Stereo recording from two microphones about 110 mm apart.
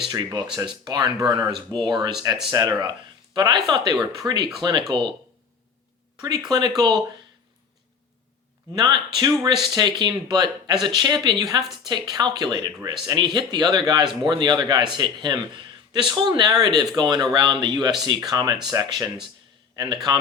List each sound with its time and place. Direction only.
0.5 s speech: 40° right (ahead or behind)
6.5 s speech: 40° right (ahead or behind)
8.7 s a man's voice: 40° right (ahead or behind)